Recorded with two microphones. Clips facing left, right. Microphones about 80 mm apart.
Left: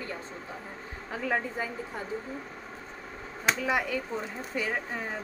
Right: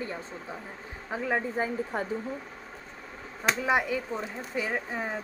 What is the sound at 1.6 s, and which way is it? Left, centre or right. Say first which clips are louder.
Speech: right 5 dB; right.